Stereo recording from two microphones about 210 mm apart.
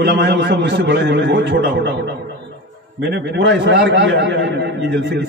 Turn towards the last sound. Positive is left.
turn(degrees=-60)  # may be behind; listen again after turning